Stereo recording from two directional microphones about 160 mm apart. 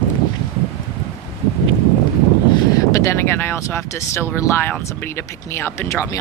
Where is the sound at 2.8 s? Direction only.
15° left (ahead or behind).